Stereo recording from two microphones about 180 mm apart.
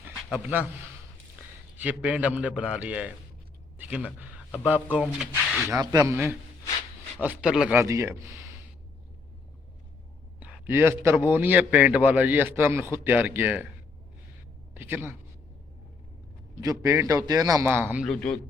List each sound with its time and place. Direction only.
0.0 s a sound: 10° right (ahead or behind)
1.8 s a man's voice: 10° right (ahead or behind)
5.6 s a man's voice: 20° right (ahead or behind)
10.4 s a man's voice: 10° right (ahead or behind)
14.8 s a man's voice: 10° right (ahead or behind)
16.6 s a man's voice: 15° right (ahead or behind)
18.0 s speech: 5° left (ahead or behind)